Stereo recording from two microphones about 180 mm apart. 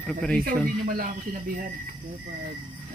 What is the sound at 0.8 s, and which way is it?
Speech, 45° right (ahead or behind).